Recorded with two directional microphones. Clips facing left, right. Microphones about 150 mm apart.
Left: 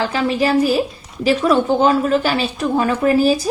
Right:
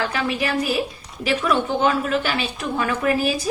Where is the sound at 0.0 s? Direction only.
30° left (ahead or behind).